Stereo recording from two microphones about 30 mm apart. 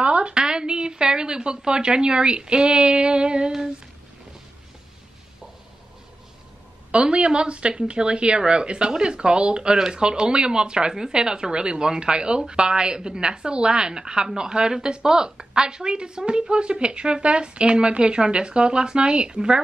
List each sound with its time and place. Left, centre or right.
0.0 s a sound: right
0.3 s speech: right
6.9 s a woman's voice: right